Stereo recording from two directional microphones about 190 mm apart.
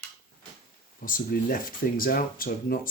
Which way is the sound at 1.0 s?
45° left (ahead or behind).